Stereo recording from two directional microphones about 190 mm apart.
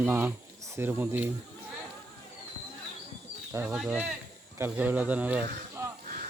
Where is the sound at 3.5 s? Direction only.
5° right (ahead or behind).